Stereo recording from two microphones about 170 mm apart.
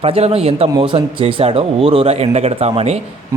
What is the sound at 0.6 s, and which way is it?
Speech, 25° right (ahead or behind).